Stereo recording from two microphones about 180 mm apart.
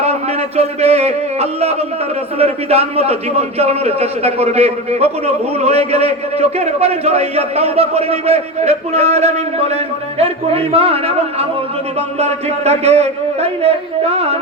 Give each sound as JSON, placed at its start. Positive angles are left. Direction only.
{"t": 0.0, "sound": "a man's voice", "side_deg": -35}